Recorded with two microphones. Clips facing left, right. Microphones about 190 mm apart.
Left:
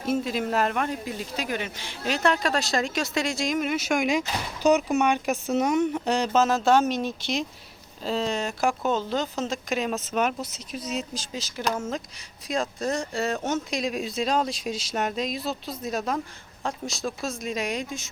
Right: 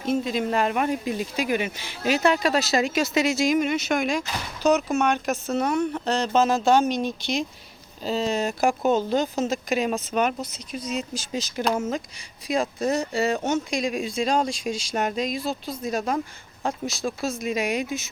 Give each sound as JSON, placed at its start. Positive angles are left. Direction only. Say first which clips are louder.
{"t": 0.0, "sound": "speech", "louder": "right 2 dB", "side_deg": 5}
{"t": 0.8, "sound": "speech", "louder": "right 4 dB", "side_deg": -10}
{"t": 11.3, "sound": "speech", "louder": "right 4 dB", "side_deg": -20}
{"t": 11.8, "sound": "speech", "louder": "right 3 dB", "side_deg": 0}